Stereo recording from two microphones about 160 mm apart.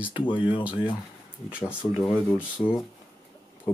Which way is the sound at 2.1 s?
15° left (ahead or behind).